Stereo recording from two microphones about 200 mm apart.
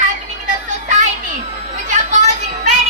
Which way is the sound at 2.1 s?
35° right (ahead or behind).